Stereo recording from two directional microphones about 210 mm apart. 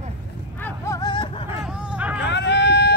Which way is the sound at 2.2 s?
55° left (ahead or behind).